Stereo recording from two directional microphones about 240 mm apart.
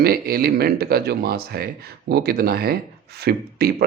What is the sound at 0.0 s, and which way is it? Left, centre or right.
Speech, right.